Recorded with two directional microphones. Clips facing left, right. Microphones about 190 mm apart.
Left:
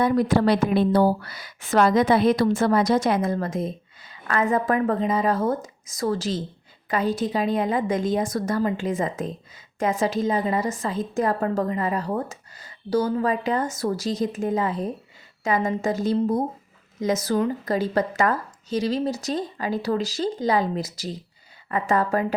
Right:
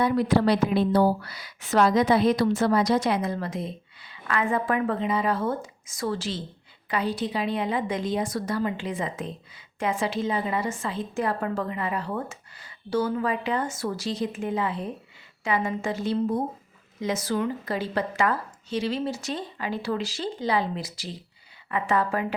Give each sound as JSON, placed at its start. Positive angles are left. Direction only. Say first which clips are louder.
{"t": 0.0, "sound": "a woman's voice", "louder": "left 2 dB", "side_deg": 45}